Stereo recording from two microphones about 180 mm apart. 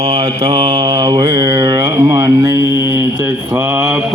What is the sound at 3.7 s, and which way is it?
Mantra, 5° right (ahead or behind).